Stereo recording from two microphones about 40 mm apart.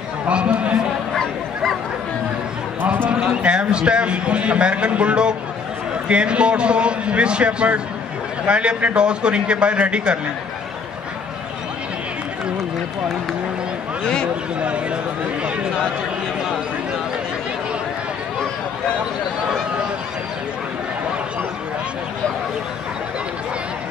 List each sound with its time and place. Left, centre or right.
0.3 s a man's voice: right
1.1 s bow-wow: centre
2.8 s a sound: right
3.4 s a man's voice: right
14.6 s a man's voice: right